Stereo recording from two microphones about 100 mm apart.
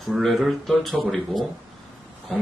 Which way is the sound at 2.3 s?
Centre (ahead or behind).